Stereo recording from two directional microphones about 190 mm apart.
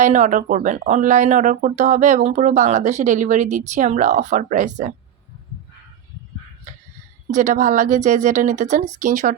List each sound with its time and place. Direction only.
0.0 s speech: 40° right (ahead or behind)
7.3 s speech: 40° right (ahead or behind)